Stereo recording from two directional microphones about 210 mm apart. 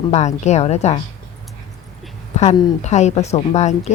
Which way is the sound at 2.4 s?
25° left (ahead or behind).